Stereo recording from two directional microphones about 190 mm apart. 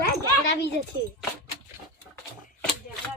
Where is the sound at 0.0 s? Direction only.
60° left (ahead or behind).